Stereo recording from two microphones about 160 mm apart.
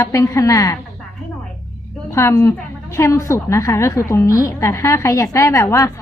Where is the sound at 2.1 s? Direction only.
15° left (ahead or behind).